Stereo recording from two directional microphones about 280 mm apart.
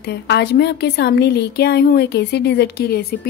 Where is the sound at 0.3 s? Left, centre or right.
Left.